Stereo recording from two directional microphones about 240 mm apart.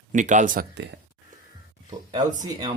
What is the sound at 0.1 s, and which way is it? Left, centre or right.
Speech, right.